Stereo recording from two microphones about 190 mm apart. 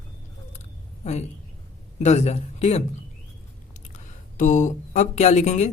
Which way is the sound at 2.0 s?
35° left (ahead or behind).